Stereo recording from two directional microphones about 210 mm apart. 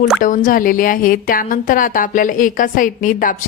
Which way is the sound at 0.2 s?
40° left (ahead or behind).